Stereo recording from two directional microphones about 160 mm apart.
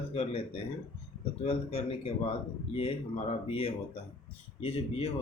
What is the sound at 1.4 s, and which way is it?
Speech, 35° left (ahead or behind).